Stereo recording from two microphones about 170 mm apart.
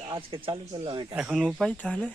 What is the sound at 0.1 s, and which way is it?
Speech, 30° right (ahead or behind).